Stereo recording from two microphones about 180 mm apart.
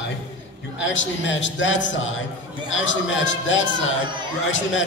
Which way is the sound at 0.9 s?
90° left.